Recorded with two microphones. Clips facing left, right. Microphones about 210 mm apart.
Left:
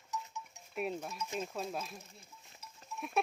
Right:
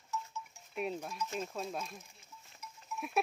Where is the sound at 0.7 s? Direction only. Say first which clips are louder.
Even; 5° left (ahead or behind).